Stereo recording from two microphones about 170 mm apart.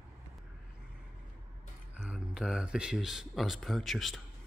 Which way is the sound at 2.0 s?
5° right (ahead or behind).